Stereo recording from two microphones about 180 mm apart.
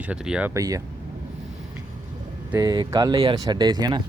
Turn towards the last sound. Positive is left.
turn(degrees=-20)  # may be behind; listen again after turning